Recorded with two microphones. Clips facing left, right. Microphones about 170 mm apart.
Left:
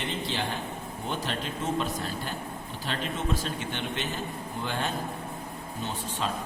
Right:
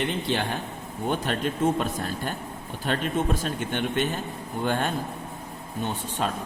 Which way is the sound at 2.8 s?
50° right (ahead or behind).